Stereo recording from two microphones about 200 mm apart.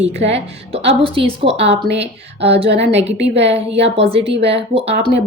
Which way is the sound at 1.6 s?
60° right (ahead or behind).